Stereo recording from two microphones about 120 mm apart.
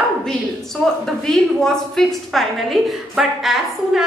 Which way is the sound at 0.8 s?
10° left (ahead or behind).